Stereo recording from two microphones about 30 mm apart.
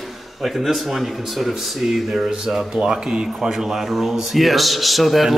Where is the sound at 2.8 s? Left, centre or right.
Right.